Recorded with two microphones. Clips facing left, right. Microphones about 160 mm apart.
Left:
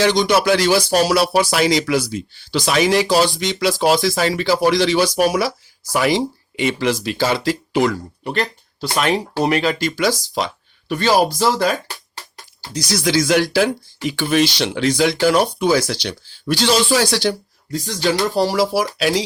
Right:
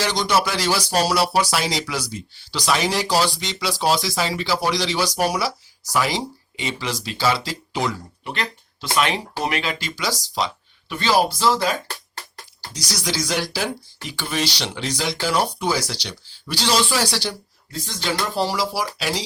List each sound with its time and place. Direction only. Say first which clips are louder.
0.0 s speech: left 6 dB; 55° left (ahead or behind)
8.2 s speech: left 7 dB; 40° left (ahead or behind)
12.7 s speech: left 9 dB; 55° left (ahead or behind)